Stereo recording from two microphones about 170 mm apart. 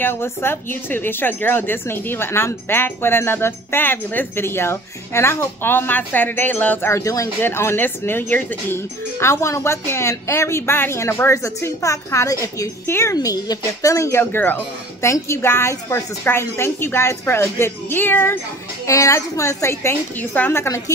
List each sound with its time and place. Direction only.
0.0 s speech: 15° left (ahead or behind)